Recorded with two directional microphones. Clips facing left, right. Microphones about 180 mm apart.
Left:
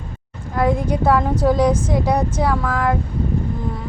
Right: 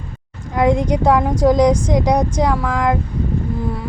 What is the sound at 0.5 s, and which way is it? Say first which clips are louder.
Speech: right 3 dB; 15° right (ahead or behind).